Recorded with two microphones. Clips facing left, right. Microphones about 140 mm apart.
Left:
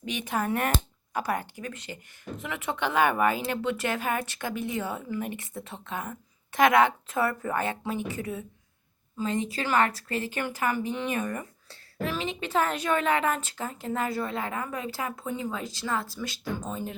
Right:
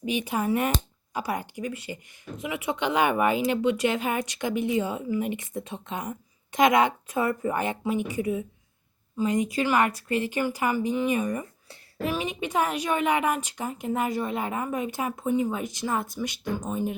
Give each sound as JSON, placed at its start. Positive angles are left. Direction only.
{"t": 0.3, "sound": "speech", "side_deg": -10}